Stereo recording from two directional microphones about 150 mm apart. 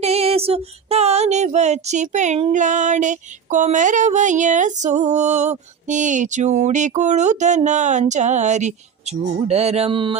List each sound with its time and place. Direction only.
0.0 s female singing: 45° right (ahead or behind)